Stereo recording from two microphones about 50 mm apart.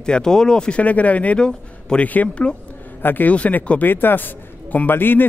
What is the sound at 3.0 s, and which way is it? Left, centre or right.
Speech, left.